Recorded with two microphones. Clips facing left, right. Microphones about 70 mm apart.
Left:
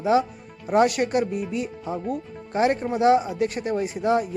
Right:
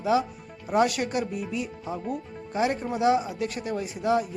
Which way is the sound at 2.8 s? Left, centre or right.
Left.